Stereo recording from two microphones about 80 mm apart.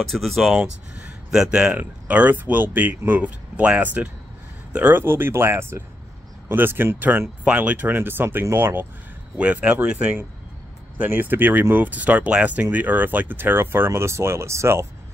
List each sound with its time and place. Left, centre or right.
0.0 s speech: centre
0.6 s speech: centre
9.4 s speech: centre; by 14.9 s right